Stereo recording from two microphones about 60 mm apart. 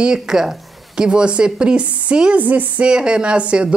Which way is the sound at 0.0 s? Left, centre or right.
Centre.